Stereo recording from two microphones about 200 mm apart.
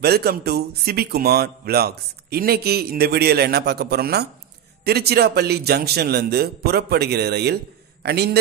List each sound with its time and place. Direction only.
0.0 s speech: 50° right (ahead or behind)